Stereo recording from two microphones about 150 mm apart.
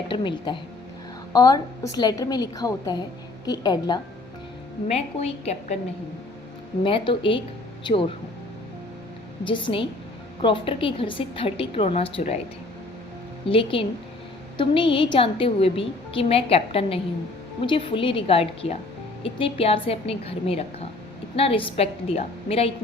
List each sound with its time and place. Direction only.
0.1 s a woman's voice: 30° left (ahead or behind)
4.9 s a woman's voice: 45° left (ahead or behind)
6.8 s a woman's voice: 35° left (ahead or behind)
9.4 s a woman's voice: 35° left (ahead or behind)
13.5 s a woman's voice: 35° left (ahead or behind)